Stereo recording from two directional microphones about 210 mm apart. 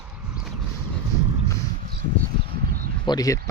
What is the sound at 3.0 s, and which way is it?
Speech, 15° left (ahead or behind).